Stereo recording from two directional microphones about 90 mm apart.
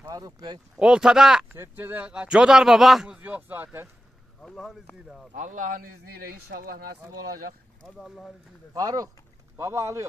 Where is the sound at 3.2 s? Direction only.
20° right (ahead or behind).